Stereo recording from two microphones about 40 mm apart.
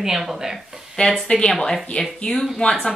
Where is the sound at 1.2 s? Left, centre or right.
Left.